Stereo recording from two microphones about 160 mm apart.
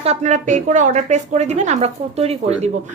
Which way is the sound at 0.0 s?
45° right (ahead or behind).